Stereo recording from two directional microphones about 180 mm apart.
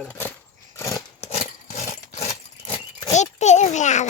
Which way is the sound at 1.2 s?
35° left (ahead or behind).